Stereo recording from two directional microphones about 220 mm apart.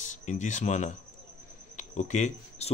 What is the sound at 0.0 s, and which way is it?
Speech, 35° left (ahead or behind).